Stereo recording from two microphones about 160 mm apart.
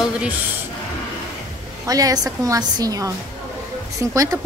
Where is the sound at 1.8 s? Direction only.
20° right (ahead or behind).